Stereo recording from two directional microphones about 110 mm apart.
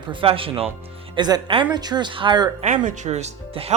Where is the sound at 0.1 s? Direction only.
55° right (ahead or behind).